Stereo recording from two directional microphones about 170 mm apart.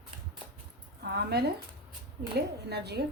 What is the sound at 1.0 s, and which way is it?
Speech, 75° right (ahead or behind).